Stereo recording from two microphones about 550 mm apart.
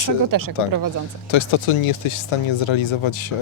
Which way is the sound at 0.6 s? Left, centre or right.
Left.